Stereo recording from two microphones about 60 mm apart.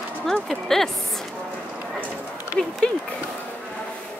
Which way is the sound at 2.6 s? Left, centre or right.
Centre.